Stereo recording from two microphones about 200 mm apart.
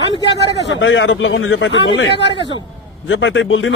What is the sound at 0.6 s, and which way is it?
A man's voice, 65° left (ahead or behind).